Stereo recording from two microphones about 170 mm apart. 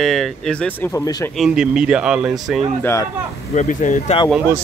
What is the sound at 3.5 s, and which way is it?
Speech, 45° left (ahead or behind).